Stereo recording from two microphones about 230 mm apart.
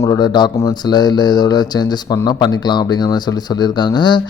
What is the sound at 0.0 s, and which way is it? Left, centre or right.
Speech, centre.